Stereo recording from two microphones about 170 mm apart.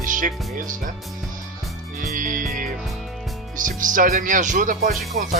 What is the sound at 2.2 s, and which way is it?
Music, 50° right (ahead or behind).